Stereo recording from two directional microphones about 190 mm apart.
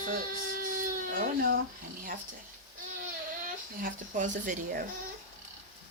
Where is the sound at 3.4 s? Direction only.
45° right (ahead or behind).